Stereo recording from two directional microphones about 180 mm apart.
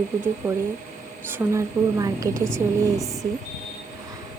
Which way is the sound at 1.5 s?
15° right (ahead or behind).